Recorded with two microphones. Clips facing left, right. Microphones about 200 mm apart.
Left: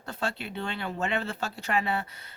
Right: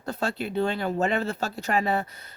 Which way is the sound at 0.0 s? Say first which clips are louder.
Right 5 dB; 40° right (ahead or behind).